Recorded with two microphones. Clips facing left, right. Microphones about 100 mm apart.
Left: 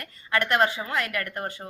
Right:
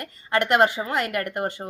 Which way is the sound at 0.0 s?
25° right (ahead or behind).